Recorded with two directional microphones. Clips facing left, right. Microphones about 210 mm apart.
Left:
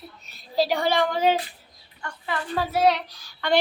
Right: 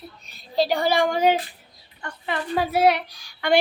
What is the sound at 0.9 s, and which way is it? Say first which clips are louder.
A woman's voice: right 2 dB; 15° right (ahead or behind).